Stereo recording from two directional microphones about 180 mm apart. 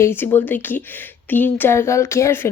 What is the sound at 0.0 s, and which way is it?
Speech, 10° left (ahead or behind).